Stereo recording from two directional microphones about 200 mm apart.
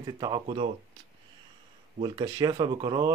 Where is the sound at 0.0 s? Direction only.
20° right (ahead or behind).